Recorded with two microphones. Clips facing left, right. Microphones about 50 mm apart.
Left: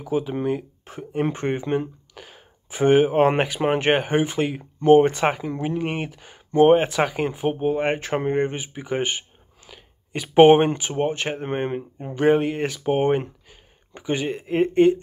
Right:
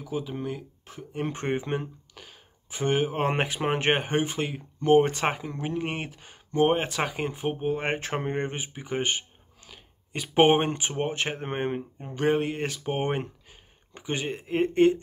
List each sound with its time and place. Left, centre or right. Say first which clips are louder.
0.0 s speech: left 8 dB; left
1.3 s speech: left 5 dB; centre
1.8 s a sound: left 8 dB; centre
3.3 s speech: left 6 dB; centre
4.6 s speech: left 8 dB; left
4.9 s speech: left 4 dB; centre
7.8 s speech: left 6 dB; centre
12.0 s speech: left 7 dB; centre
14.7 s speech: left 4 dB; centre